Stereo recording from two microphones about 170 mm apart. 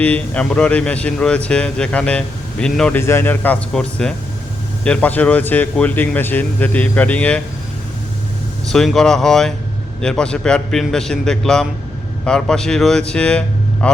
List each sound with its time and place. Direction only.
0.0 s speech: 5° left (ahead or behind)
8.6 s a man's voice: centre (ahead or behind)